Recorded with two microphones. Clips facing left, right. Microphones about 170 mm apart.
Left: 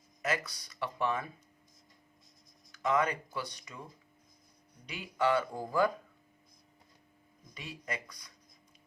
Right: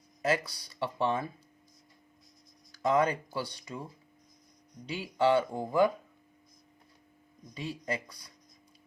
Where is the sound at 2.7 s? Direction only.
35° right (ahead or behind).